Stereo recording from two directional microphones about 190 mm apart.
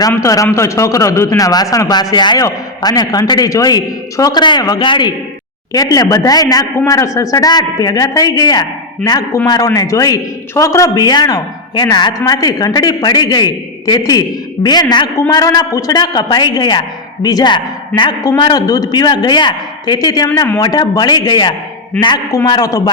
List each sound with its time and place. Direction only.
0.1 s a man's voice: 15° left (ahead or behind)